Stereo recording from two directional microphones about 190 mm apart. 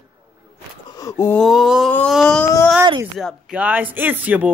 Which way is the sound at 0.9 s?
20° left (ahead or behind).